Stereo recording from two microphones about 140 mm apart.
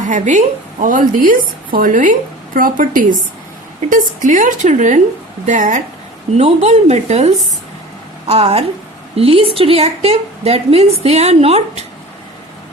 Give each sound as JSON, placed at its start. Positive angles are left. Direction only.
{"t": 0.1, "sound": "a woman's voice", "side_deg": -65}
{"t": 6.3, "sound": "a woman's voice", "side_deg": -50}